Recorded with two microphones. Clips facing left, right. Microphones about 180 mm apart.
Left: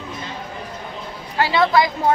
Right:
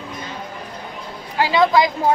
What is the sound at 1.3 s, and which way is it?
Speech, 15° right (ahead or behind).